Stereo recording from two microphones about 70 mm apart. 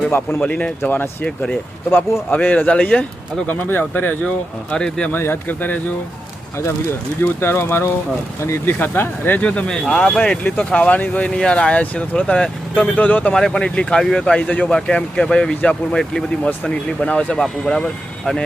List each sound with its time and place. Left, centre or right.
0.1 s speech: left
0.4 s speech: centre
0.8 s speech: left
1.2 s speech: centre
3.6 s speech: left
5.1 s speech: left
7.2 s speech: left
9.6 s speech: centre
10.6 s speech: centre
13.3 s speech: centre